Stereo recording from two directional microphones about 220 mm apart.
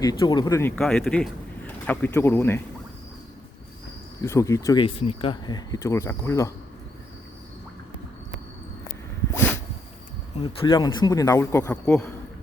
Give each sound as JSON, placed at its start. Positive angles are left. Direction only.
{"t": 0.0, "sound": "speech", "side_deg": 20}
{"t": 0.8, "sound": "speech", "side_deg": 0}
{"t": 4.2, "sound": "speech", "side_deg": 15}
{"t": 10.4, "sound": "speech", "side_deg": 20}